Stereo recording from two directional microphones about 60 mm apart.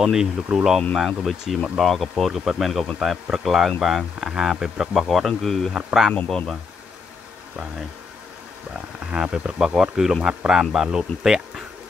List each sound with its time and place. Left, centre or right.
0.0 s speech: centre
0.9 s speech: centre
5.7 s speech: centre
6.2 s speech: centre
9.0 s speech: centre